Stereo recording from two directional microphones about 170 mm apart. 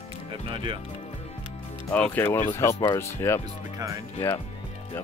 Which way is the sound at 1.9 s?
10° left (ahead or behind).